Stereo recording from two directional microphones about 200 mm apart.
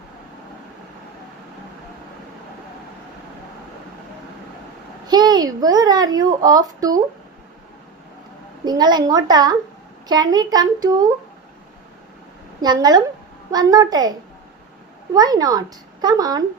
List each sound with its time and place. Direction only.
5.0 s a woman's voice: 20° right (ahead or behind)
8.6 s a woman's voice: 20° right (ahead or behind)
12.6 s a woman's voice: 20° right (ahead or behind)